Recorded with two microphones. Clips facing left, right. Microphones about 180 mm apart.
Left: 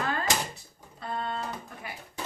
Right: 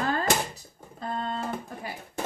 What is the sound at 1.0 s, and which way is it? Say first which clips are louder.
Speech: right 2 dB; 40° right (ahead or behind).